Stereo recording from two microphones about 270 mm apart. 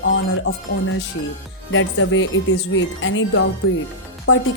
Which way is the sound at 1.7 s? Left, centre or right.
Left.